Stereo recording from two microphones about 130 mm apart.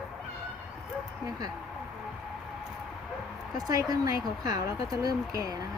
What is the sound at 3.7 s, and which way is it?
Speech, 25° right (ahead or behind).